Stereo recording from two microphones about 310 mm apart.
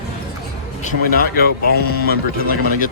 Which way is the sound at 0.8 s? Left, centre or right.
Left.